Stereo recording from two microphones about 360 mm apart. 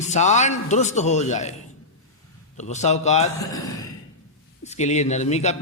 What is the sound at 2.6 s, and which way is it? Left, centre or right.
A man's voice, centre.